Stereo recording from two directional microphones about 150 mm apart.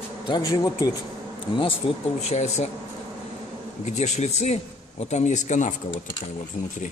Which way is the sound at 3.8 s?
50° left (ahead or behind).